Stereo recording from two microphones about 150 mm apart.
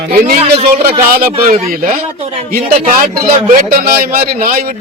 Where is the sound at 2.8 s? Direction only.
70° right (ahead or behind).